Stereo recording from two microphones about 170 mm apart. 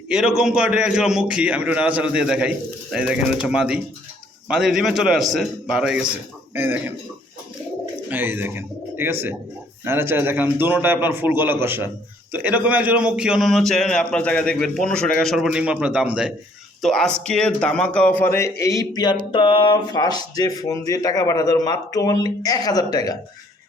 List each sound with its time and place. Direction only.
0.1 s a man's voice: 5° right (ahead or behind)
8.1 s a man's voice: 10° right (ahead or behind); by 18.3 s 10° left (ahead or behind)
18.6 s speech: 20° left (ahead or behind)